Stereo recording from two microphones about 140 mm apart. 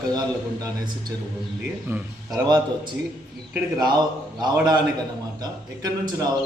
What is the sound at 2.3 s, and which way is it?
A man's voice, 30° right (ahead or behind).